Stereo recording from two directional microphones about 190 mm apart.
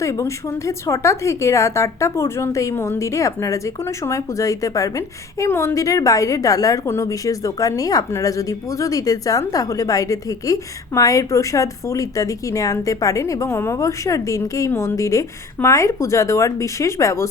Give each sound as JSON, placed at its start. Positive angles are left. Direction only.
{"t": 0.0, "sound": "speech", "side_deg": 15}